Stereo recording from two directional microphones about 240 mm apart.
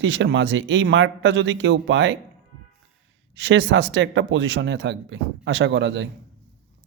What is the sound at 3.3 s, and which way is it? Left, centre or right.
Speech, right.